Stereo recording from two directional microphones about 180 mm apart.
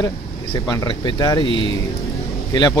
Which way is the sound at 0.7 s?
25° left (ahead or behind).